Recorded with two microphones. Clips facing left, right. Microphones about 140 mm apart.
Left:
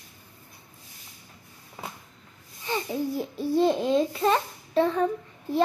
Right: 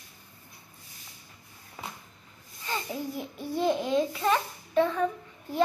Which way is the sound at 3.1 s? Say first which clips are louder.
Left 8 dB; 25° left (ahead or behind).